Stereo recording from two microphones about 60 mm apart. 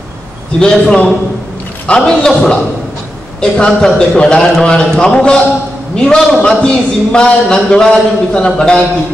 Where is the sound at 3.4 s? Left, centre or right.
Centre.